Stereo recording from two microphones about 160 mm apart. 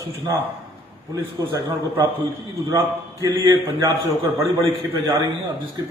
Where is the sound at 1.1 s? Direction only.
20° right (ahead or behind).